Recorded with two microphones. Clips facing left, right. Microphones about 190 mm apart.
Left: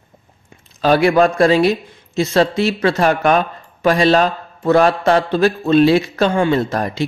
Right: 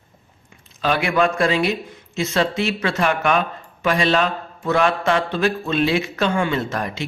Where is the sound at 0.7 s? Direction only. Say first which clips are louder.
Left 7 dB; 35° left (ahead or behind).